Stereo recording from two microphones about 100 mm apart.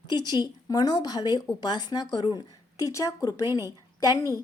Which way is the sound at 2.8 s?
35° left (ahead or behind).